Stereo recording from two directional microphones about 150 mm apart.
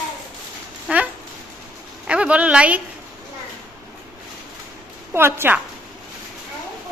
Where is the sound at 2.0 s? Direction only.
5° right (ahead or behind).